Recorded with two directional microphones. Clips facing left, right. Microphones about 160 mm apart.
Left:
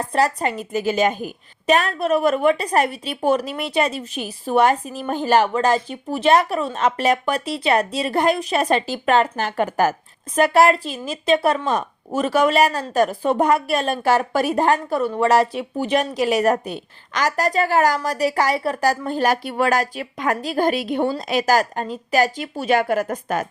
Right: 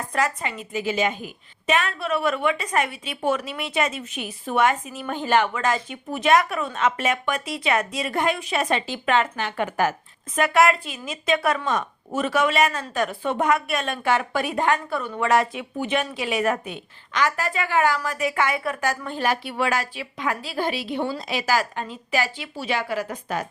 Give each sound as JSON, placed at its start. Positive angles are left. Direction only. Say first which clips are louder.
{"t": 0.0, "sound": "a woman's voice", "louder": "left 5 dB", "side_deg": 35}